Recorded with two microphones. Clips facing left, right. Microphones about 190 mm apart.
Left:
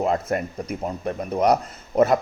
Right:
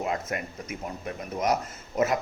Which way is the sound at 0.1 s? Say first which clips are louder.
Left 7 dB; 35° left (ahead or behind).